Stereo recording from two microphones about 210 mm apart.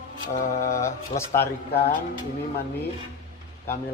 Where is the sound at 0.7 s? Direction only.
15° left (ahead or behind).